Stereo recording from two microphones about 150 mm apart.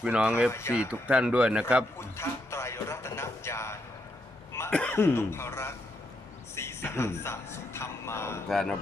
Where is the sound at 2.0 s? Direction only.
20° left (ahead or behind).